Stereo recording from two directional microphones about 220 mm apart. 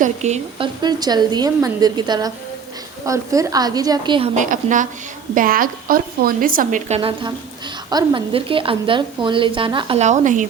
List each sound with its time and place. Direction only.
0.0 s a woman's voice: 30° right (ahead or behind)
0.8 s a woman's voice: 20° right (ahead or behind)
4.4 s a woman's voice: 35° right (ahead or behind)